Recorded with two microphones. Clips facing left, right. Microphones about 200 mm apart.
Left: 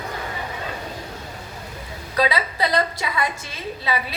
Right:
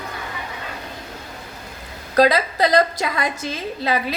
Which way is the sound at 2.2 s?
45° right (ahead or behind).